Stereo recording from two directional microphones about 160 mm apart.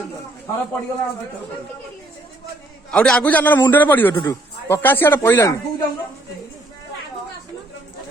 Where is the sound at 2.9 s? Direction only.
5° left (ahead or behind).